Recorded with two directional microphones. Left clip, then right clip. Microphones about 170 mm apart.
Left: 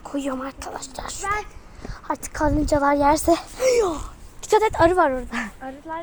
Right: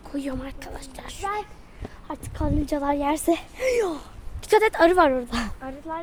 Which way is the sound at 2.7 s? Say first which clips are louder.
Left 7 dB; 5° right (ahead or behind).